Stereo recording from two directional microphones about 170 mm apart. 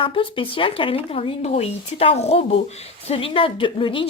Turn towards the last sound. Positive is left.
turn(degrees=30)  # may be behind; listen again after turning